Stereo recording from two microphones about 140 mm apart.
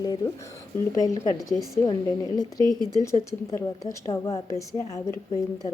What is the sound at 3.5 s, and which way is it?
Speech, 20° left (ahead or behind).